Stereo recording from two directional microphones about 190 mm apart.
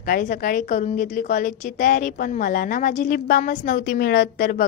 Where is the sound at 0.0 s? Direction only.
45° left (ahead or behind).